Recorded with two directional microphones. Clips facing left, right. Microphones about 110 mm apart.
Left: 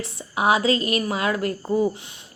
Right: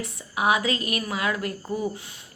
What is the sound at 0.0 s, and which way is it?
A woman's voice, 30° left (ahead or behind).